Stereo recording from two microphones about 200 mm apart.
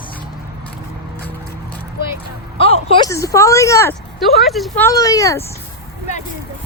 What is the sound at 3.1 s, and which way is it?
Speech, 15° left (ahead or behind).